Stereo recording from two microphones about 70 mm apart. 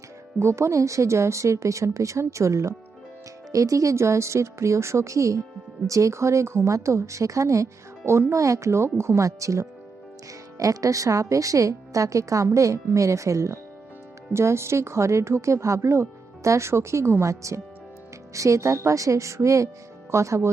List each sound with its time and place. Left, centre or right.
0.3 s speech: right